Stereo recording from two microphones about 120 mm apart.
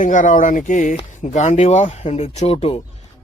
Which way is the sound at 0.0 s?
90° left.